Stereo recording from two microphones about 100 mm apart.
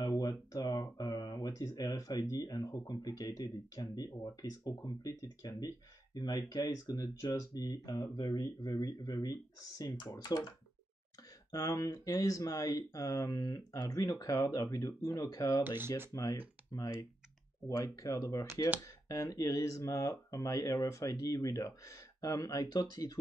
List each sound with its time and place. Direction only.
0.0 s speech: 40° left (ahead or behind)
11.5 s speech: 35° left (ahead or behind)
15.6 s speech: 20° right (ahead or behind)
16.1 s speech: 35° left (ahead or behind)